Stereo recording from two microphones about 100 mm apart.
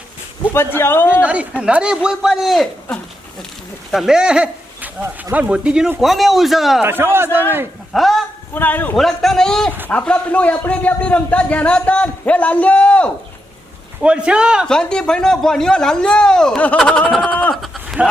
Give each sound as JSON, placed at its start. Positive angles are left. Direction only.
{"t": 0.5, "sound": "speech", "side_deg": 25}
{"t": 1.2, "sound": "a man's voice", "side_deg": -15}
{"t": 3.9, "sound": "a man's voice", "side_deg": -5}
{"t": 6.8, "sound": "a man's voice", "side_deg": -25}
{"t": 7.9, "sound": "speech", "side_deg": 0}
{"t": 8.5, "sound": "speech", "side_deg": 20}
{"t": 9.0, "sound": "a man's voice", "side_deg": 5}
{"t": 14.0, "sound": "a man's voice", "side_deg": -10}
{"t": 14.7, "sound": "a man's voice", "side_deg": 10}
{"t": 17.5, "sound": "a sound", "side_deg": -5}